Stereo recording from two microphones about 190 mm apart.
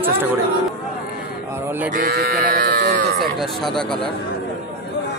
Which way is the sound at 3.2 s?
Centre (ahead or behind).